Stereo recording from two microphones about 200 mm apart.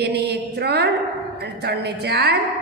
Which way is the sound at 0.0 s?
55° right (ahead or behind).